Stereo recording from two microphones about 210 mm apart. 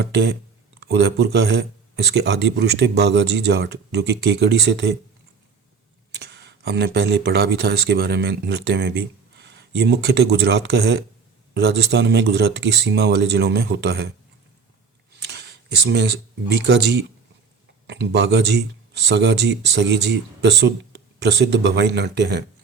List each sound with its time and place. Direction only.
0.0 s speech: 50° right (ahead or behind)
6.1 s speech: 50° right (ahead or behind)
15.1 s speech: 55° right (ahead or behind)